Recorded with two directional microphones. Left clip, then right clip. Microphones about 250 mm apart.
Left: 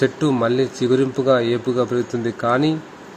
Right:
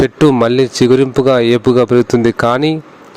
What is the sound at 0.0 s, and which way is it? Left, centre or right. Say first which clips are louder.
Speech: right 8 dB; right.